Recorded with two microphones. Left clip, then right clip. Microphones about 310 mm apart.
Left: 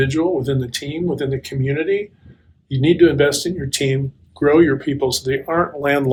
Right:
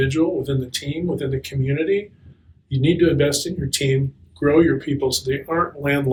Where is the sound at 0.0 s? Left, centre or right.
Left.